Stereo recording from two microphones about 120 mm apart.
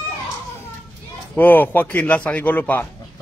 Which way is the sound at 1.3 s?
15° left (ahead or behind).